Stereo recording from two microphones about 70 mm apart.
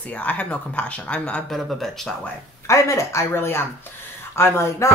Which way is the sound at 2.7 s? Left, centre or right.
Left.